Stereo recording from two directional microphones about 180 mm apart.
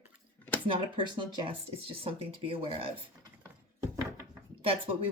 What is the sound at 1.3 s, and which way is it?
Speech, 30° right (ahead or behind).